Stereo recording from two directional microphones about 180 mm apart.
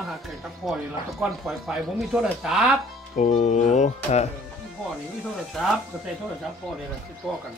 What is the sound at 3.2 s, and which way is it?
Speech, 40° left (ahead or behind).